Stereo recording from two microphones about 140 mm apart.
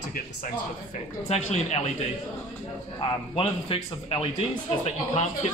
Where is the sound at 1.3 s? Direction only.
50° left (ahead or behind).